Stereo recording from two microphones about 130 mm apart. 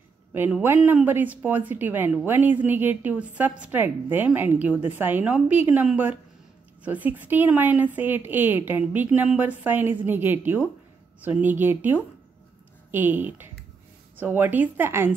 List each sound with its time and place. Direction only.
0.3 s speech: 15° right (ahead or behind)